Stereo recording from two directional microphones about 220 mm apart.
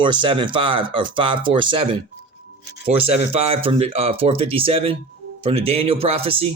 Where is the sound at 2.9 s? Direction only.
25° right (ahead or behind).